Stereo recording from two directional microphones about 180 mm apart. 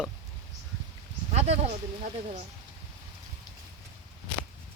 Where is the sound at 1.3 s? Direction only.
35° right (ahead or behind).